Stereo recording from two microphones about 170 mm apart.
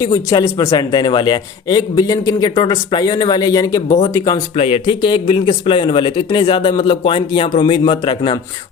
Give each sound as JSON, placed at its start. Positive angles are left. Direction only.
{"t": 0.0, "sound": "a man's voice", "side_deg": 20}
{"t": 4.5, "sound": "speech", "side_deg": 35}